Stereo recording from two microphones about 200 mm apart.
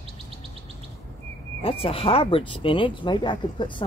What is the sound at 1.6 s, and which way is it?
Speech, 30° left (ahead or behind).